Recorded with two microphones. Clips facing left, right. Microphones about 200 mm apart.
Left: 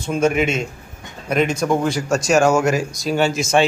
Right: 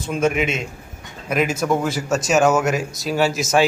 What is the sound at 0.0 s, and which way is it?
A man's voice, centre (ahead or behind).